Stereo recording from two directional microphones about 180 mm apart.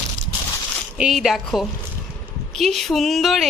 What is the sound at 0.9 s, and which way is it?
A woman's voice, centre (ahead or behind).